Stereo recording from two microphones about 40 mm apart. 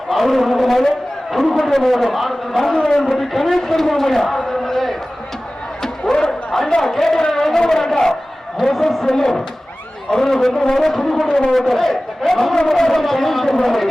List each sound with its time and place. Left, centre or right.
0.1 s a man's voice: centre
5.8 s crowd: centre
6.5 s a man's voice: centre
7.3 s a sound: centre
8.5 s a man's voice: centre
10.8 s brass instrument: centre
11.3 s a man's voice: centre
11.7 s a man's voice: centre